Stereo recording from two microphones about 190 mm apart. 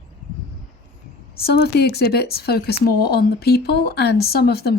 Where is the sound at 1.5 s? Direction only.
60° left (ahead or behind).